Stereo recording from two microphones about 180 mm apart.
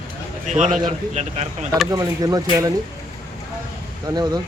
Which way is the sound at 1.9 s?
20° right (ahead or behind).